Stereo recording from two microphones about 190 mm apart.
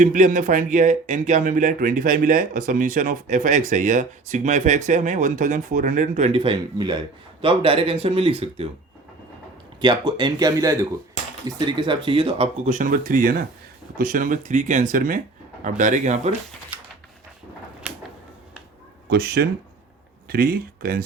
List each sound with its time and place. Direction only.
0.0 s speech: 45° right (ahead or behind)
9.8 s speech: 20° right (ahead or behind); by 16.3 s 40° right (ahead or behind)
17.8 s a sound: 5° right (ahead or behind)
19.0 s speech: 55° right (ahead or behind)